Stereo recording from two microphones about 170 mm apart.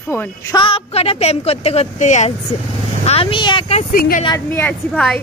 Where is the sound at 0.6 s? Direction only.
30° left (ahead or behind).